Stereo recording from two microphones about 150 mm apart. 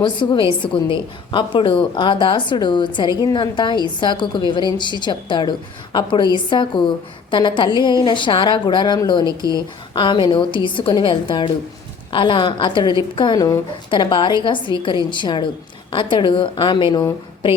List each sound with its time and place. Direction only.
0.0 s a woman's voice: 30° left (ahead or behind)